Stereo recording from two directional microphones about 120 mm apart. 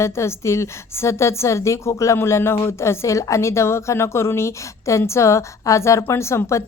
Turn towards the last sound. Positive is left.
turn(degrees=25)  # may be behind; listen again after turning